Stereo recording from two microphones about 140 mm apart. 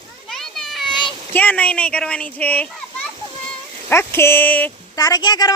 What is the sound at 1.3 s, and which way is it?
Speech, 10° left (ahead or behind).